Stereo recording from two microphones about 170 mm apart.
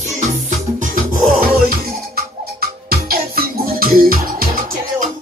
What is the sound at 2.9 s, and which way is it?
Music, 60° right (ahead or behind).